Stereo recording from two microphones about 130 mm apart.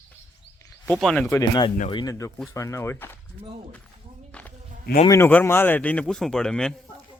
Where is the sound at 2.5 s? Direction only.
25° left (ahead or behind).